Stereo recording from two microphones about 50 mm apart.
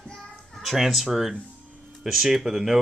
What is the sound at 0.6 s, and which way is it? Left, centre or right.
Speech, centre.